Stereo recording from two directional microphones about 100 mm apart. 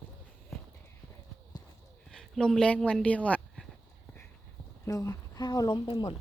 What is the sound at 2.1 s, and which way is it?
Speech, 5° left (ahead or behind).